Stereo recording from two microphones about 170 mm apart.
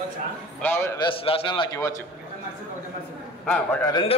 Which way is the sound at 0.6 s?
10° left (ahead or behind).